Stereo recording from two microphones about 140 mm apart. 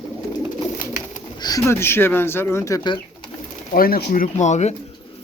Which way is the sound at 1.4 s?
25° left (ahead or behind).